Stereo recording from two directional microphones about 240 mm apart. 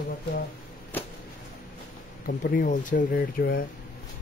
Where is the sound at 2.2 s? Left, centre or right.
Left.